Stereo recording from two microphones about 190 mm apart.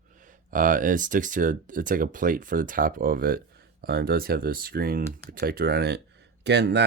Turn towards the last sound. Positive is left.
turn(degrees=-65)  # may be behind; listen again after turning